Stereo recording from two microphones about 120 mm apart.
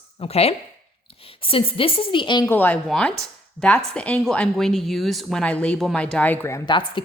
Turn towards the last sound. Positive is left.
turn(degrees=20)  # may be behind; listen again after turning